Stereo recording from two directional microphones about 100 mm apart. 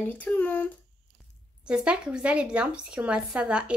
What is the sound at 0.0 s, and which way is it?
Speech, 15° left (ahead or behind).